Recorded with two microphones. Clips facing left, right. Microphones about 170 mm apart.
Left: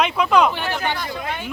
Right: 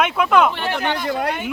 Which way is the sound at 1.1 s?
75° right (ahead or behind).